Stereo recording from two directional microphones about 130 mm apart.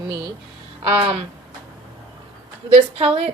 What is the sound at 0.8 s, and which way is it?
Speech, 50° right (ahead or behind).